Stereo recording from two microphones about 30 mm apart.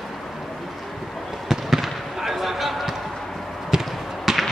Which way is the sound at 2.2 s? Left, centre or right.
Centre.